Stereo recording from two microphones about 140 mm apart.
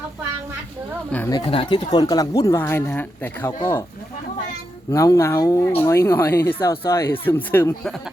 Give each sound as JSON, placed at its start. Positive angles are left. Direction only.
{"t": 1.1, "sound": "speech", "side_deg": 10}
{"t": 1.5, "sound": "speech", "side_deg": 40}
{"t": 4.9, "sound": "speech", "side_deg": 20}